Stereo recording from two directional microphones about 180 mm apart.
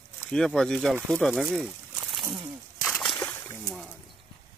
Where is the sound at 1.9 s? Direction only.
5° right (ahead or behind).